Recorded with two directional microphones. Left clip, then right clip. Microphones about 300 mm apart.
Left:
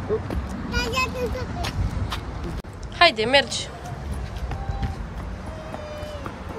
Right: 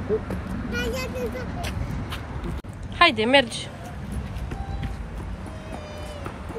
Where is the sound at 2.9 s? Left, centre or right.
Centre.